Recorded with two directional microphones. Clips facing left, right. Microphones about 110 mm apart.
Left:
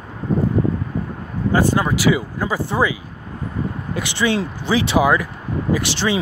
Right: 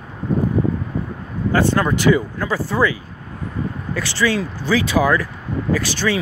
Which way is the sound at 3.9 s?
20° left (ahead or behind).